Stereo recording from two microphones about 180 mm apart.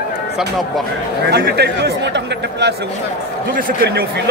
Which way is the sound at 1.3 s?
65° right (ahead or behind).